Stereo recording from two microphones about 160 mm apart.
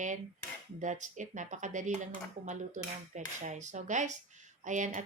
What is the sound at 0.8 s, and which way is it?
Speech, 50° right (ahead or behind).